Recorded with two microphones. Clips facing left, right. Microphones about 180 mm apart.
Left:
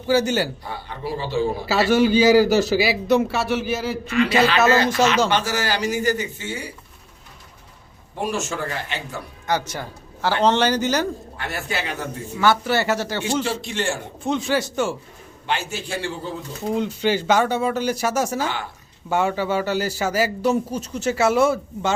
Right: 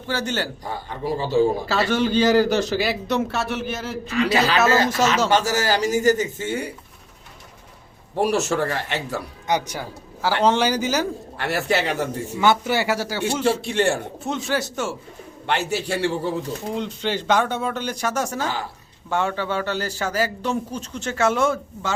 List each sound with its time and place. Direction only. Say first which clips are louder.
0.1 s a man's voice: left 6 dB; 10° left (ahead or behind)
0.6 s a man's voice: right 2 dB; 45° right (ahead or behind)
1.6 s a man's voice: left 4 dB; 10° left (ahead or behind)
4.1 s a man's voice: left 1 dB; 40° right (ahead or behind)
8.2 s speech: right 5 dB; 75° right (ahead or behind)
9.5 s a man's voice: right 1 dB; 15° right (ahead or behind)
11.3 s speech: right 10 dB; 75° right (ahead or behind)
12.4 s a man's voice: even; 20° right (ahead or behind)
13.7 s a man's voice: right 5 dB; 60° right (ahead or behind)
14.3 s a man's voice: left 3 dB; centre (ahead or behind)
15.4 s speech: right 3 dB; 65° right (ahead or behind)
16.7 s a man's voice: left 6 dB; 5° left (ahead or behind)